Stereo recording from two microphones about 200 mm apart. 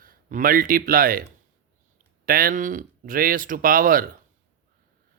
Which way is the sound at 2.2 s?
45° right (ahead or behind).